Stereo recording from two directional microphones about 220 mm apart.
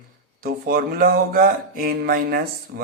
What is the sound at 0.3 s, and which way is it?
Speech, 40° right (ahead or behind).